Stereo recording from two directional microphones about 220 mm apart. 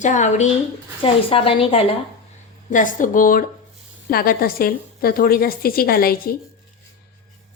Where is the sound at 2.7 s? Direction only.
35° left (ahead or behind).